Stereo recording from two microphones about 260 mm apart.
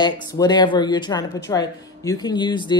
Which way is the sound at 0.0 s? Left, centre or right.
Centre.